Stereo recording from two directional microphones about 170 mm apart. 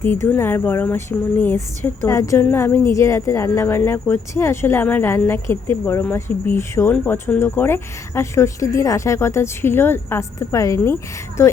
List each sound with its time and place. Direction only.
0.0 s speech: 15° left (ahead or behind)